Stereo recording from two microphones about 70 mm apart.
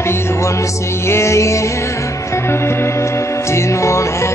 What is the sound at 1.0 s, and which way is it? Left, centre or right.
Music, left.